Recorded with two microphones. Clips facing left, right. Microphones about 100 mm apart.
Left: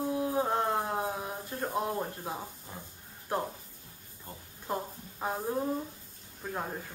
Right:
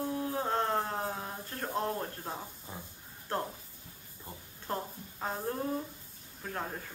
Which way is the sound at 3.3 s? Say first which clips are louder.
Left 2 dB; 10° left (ahead or behind).